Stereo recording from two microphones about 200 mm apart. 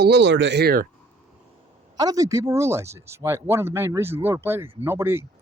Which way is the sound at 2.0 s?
20° right (ahead or behind).